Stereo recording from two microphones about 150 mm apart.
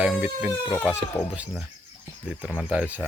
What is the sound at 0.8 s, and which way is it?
Speech, 20° left (ahead or behind).